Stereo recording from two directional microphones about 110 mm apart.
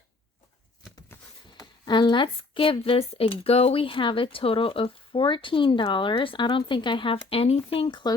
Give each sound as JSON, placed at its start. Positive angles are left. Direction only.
{"t": 1.8, "sound": "speech", "side_deg": 45}